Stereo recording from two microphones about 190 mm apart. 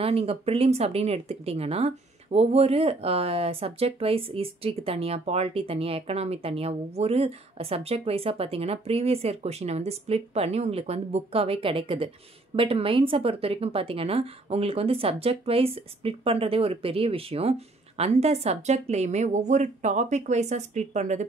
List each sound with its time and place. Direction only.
0.0 s speech: 30° right (ahead or behind)